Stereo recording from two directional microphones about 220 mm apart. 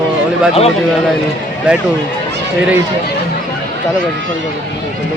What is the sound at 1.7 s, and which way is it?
Speech, 5° right (ahead or behind).